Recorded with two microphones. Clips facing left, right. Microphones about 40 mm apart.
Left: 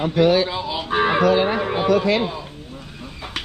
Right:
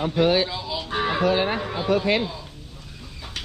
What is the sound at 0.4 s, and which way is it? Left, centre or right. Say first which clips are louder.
Livestock: left 4 dB; left.